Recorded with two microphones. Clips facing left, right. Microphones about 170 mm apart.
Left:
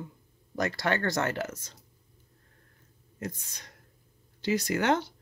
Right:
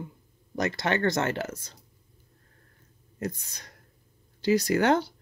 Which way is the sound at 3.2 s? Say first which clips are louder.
Right 4 dB; 35° right (ahead or behind).